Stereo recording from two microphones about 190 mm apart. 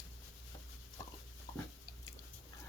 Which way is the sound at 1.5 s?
25° left (ahead or behind).